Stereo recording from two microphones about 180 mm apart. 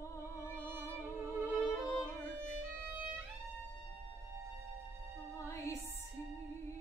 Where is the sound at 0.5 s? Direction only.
10° right (ahead or behind).